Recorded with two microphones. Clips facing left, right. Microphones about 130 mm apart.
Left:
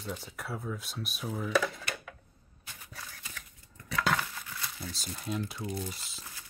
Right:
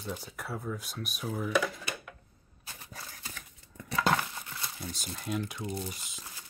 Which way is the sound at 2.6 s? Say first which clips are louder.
Right 1 dB; 40° right (ahead or behind).